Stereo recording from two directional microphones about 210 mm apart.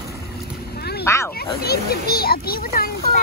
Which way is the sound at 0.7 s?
50° left (ahead or behind).